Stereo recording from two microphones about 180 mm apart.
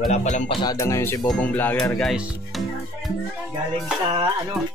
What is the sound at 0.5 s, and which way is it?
Music, 20° left (ahead or behind).